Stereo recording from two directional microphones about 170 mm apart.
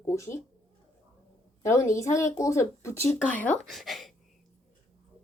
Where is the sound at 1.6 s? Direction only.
15° left (ahead or behind); by 4.1 s centre (ahead or behind).